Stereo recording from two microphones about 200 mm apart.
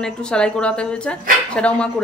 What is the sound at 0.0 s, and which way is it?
Speech, 5° left (ahead or behind).